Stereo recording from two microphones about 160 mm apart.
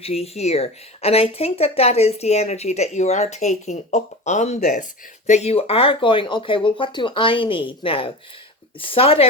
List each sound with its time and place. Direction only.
0.0 s speech: 40° left (ahead or behind)